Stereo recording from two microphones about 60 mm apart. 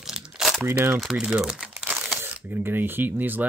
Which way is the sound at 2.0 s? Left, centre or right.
Right.